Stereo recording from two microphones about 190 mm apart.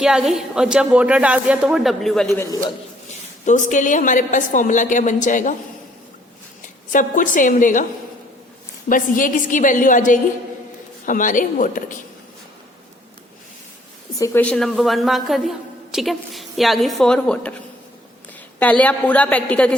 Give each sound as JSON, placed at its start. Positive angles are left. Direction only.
{"t": 0.0, "sound": "a woman's voice", "side_deg": 0}
{"t": 2.3, "sound": "a woman's voice", "side_deg": 15}
{"t": 3.4, "sound": "a woman's voice", "side_deg": 40}
{"t": 6.9, "sound": "a woman's voice", "side_deg": 45}
{"t": 8.9, "sound": "a woman's voice", "side_deg": 45}
{"t": 14.2, "sound": "a woman's voice", "side_deg": 10}
{"t": 18.6, "sound": "a woman's voice", "side_deg": 10}